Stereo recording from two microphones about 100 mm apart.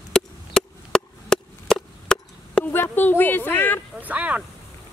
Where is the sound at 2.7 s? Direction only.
20° left (ahead or behind).